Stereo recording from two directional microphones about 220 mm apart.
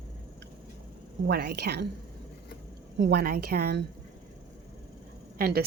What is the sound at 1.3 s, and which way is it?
Speech, 45° right (ahead or behind).